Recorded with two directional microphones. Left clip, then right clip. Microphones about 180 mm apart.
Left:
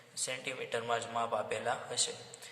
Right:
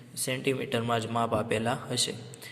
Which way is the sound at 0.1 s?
30° right (ahead or behind).